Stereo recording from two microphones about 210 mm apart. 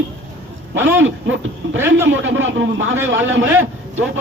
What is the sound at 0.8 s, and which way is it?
Speech, 10° right (ahead or behind).